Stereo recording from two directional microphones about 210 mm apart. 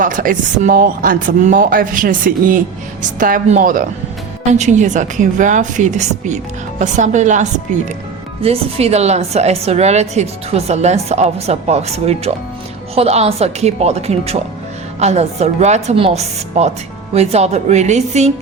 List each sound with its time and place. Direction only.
0.0 s a woman's voice: 40° right (ahead or behind)